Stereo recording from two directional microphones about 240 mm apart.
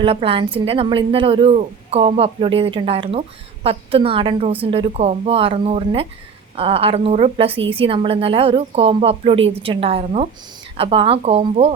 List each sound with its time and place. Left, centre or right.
0.0 s a woman's voice: right